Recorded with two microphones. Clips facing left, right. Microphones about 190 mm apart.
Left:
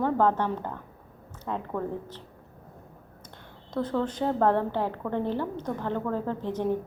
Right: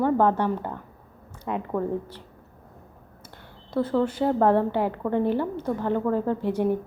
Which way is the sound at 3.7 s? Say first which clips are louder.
Right 4 dB; 10° right (ahead or behind).